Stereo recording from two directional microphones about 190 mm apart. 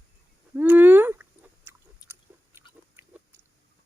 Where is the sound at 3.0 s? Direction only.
10° right (ahead or behind).